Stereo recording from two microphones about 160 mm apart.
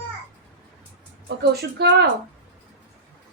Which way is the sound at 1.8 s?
90° right.